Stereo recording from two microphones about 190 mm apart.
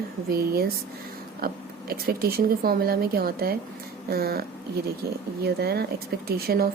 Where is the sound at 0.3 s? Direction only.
55° right (ahead or behind).